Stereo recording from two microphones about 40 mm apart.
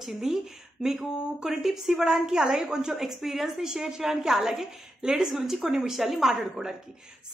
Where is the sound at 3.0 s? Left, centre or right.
Centre.